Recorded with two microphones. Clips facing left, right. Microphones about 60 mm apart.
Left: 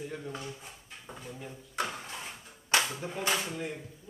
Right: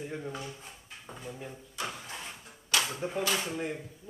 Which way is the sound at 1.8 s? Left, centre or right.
Left.